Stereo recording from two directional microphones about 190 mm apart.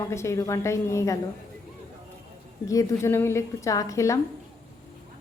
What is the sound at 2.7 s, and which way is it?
A woman's voice, 15° left (ahead or behind).